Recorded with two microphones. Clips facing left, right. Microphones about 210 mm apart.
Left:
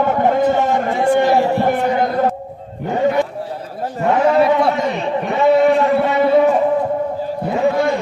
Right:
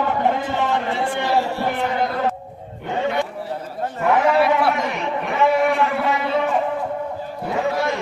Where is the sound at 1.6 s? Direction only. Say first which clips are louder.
Left 6 dB; 50° left (ahead or behind).